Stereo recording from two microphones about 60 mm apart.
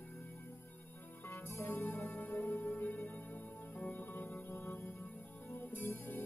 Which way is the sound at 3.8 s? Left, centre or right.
Left.